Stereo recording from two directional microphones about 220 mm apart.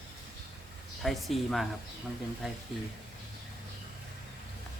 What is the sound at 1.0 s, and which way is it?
Speech, centre (ahead or behind).